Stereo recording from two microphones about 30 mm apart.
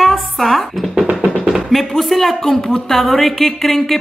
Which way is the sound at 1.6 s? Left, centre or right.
Centre.